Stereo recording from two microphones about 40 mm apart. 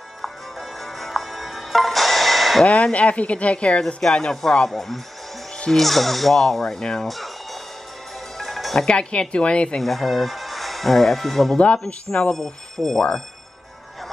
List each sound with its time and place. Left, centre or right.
0.2 s music: centre
2.7 s a woman's voice: left
4.1 s speech: centre
8.4 s music: centre
9.3 s speech: left
9.8 s speech: centre
11.5 s speech: left
12.1 s speech: centre